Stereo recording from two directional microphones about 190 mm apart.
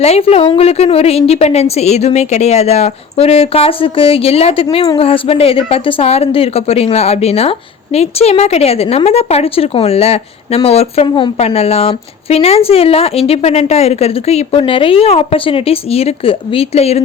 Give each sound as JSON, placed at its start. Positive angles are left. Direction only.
{"t": 0.0, "sound": "a woman's voice", "side_deg": 35}